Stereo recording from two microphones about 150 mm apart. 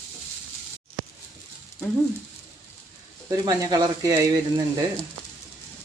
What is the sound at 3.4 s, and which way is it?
Speech, 25° right (ahead or behind).